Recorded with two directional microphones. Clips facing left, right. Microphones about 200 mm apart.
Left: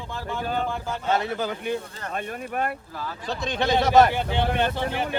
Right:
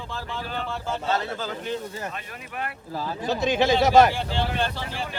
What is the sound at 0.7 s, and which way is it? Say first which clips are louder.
Speech: left 1 dB; 15° left (ahead or behind).